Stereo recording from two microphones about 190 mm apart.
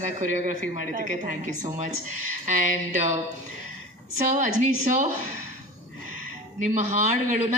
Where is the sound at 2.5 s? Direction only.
45° right (ahead or behind).